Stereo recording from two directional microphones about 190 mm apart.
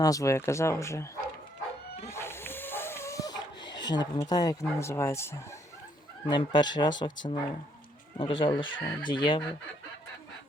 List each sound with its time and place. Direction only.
0.0 s speech: 20° left (ahead or behind)
2.0 s snoring: 15° left (ahead or behind)
4.8 s speech: 15° left (ahead or behind)